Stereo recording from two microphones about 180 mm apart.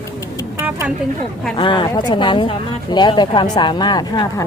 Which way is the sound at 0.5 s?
15° right (ahead or behind).